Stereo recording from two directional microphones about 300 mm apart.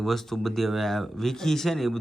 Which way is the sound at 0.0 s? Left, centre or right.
Centre.